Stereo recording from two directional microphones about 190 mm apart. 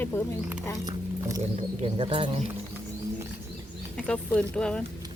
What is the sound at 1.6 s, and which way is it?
Speech, 30° right (ahead or behind).